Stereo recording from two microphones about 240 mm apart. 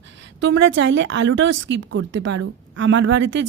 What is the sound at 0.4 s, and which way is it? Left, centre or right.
A woman's voice, right.